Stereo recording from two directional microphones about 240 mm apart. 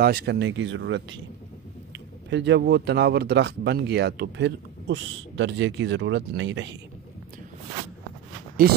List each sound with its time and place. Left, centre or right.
0.0 s speech: right
2.2 s speech: right